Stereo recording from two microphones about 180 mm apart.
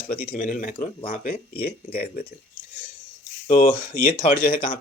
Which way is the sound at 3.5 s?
45° left (ahead or behind).